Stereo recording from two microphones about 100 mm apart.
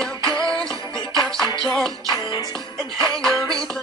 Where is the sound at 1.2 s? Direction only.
5° left (ahead or behind).